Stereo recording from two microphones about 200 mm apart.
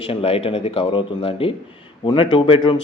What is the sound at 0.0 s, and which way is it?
Speech, 30° left (ahead or behind).